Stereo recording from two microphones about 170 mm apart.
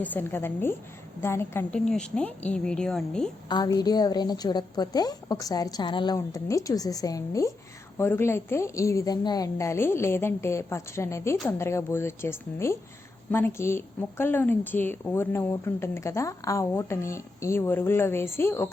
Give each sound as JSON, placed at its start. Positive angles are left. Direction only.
{"t": 0.0, "sound": "a woman's voice", "side_deg": 10}
{"t": 3.5, "sound": "a woman's voice", "side_deg": 25}